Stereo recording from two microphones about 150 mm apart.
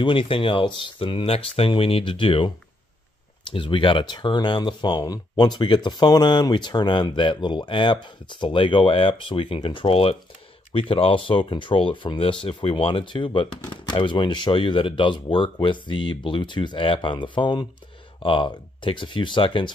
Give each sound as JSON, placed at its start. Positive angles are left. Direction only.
{"t": 0.0, "sound": "speech", "side_deg": 35}